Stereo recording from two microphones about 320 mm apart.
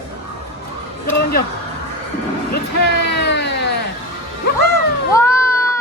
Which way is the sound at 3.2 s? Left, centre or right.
Left.